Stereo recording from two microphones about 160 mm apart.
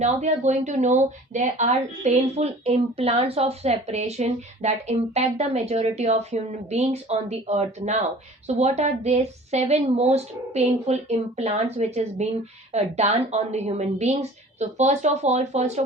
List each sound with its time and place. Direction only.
0.0 s a woman's voice: 45° right (ahead or behind)